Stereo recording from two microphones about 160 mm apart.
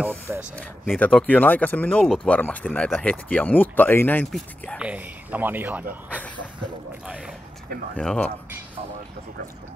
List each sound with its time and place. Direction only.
0.3 s speech: 10° right (ahead or behind)
0.9 s speech: 10° left (ahead or behind)
4.7 s speech: 10° right (ahead or behind)
7.9 s speech: 5° left (ahead or behind)